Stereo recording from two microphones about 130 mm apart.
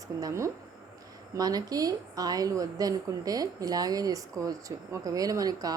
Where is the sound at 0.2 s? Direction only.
25° right (ahead or behind).